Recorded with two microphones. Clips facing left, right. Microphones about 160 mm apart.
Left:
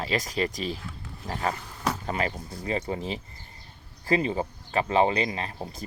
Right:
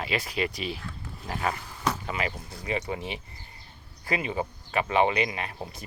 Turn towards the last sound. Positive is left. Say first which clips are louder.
# left 1 dB
turn(degrees=30)  # may be behind; listen again after turning